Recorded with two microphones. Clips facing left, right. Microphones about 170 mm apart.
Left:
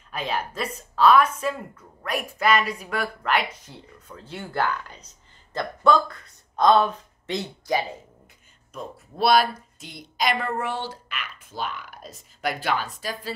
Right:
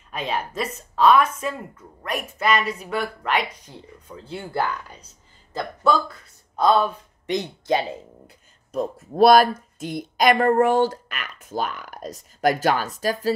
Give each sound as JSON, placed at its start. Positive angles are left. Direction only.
{"t": 0.1, "sound": "a woman's voice", "side_deg": 0}
{"t": 8.7, "sound": "speech", "side_deg": -45}